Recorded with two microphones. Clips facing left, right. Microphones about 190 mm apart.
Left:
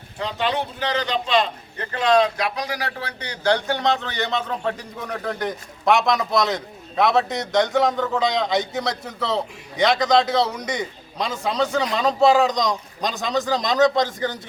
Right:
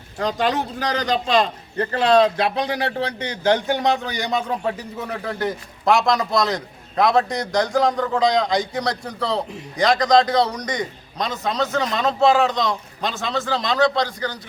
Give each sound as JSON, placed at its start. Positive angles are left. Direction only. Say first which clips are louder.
{"t": 0.2, "sound": "a man's voice", "louder": "right 3 dB", "side_deg": -45}